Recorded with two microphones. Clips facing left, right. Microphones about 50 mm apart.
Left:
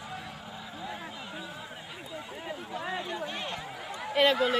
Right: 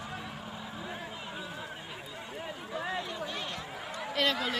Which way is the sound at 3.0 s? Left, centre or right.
Centre.